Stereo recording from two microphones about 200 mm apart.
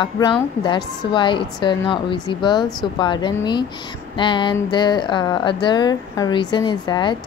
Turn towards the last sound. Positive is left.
turn(degrees=20)  # may be behind; listen again after turning